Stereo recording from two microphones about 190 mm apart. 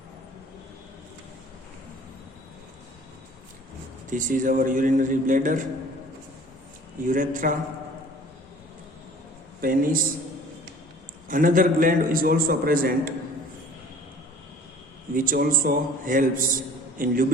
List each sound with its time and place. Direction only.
4.1 s a man's voice: 45° right (ahead or behind)
7.1 s a man's voice: 45° right (ahead or behind)
9.6 s a man's voice: 50° right (ahead or behind)
11.3 s a man's voice: 45° right (ahead or behind)
15.1 s a man's voice: 45° right (ahead or behind)